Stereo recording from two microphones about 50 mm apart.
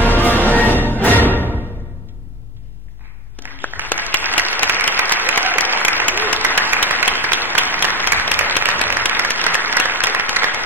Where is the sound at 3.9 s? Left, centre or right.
Left.